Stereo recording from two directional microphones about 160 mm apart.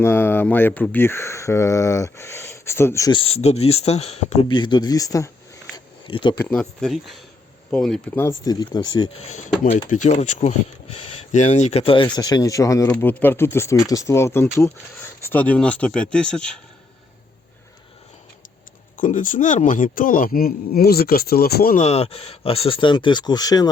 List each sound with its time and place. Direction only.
0.0 s speech: 15° left (ahead or behind)
3.1 s speech: 35° left (ahead or behind)
4.5 s speech: 30° left (ahead or behind)
5.7 s a sound: 30° left (ahead or behind)
6.3 s speech: 10° left (ahead or behind)
8.3 s speech: 25° left (ahead or behind)
9.1 s speech: 45° left (ahead or behind); by 12.9 s 20° left (ahead or behind)
12.9 s speech: 10° left (ahead or behind)
18.9 s speech: 55° left (ahead or behind)
21.8 s speech: 40° left (ahead or behind); by 23.6 s 25° left (ahead or behind)